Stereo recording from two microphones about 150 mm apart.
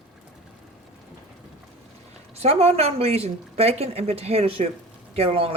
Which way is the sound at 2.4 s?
45° right (ahead or behind).